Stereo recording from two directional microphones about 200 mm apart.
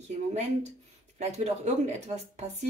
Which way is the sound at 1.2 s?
35° right (ahead or behind).